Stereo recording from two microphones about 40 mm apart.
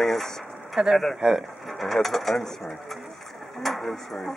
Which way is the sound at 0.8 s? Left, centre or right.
Right.